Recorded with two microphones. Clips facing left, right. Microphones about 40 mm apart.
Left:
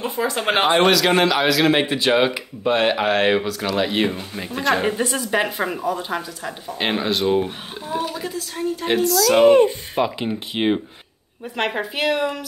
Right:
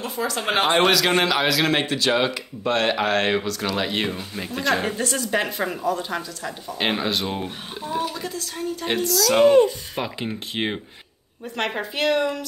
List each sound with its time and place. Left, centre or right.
0.0 s speech: left
0.5 s a man's voice: centre
9.5 s speech: left
9.9 s a woman's voice: centre